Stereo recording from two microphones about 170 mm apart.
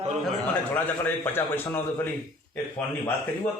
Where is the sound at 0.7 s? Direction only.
10° left (ahead or behind).